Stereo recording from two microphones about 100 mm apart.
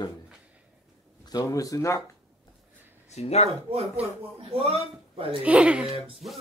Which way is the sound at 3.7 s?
85° right.